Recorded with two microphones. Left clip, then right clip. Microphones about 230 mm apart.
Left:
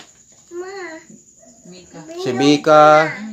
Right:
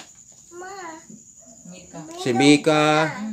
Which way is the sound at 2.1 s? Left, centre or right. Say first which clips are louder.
Left 1 dB; centre.